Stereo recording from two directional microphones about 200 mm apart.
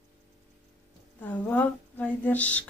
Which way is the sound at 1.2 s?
10° left (ahead or behind).